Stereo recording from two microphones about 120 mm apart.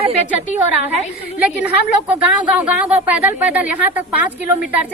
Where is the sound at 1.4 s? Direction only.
10° right (ahead or behind).